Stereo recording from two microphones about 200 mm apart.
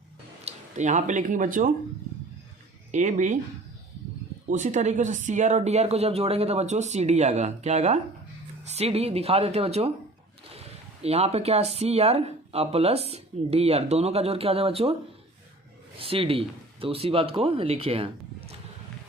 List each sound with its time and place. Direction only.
0.4 s speech: 35° right (ahead or behind)
2.9 s speech: 35° right (ahead or behind)
4.4 s speech: 40° right (ahead or behind)
11.0 s speech: 30° right (ahead or behind)
16.0 s speech: 25° right (ahead or behind)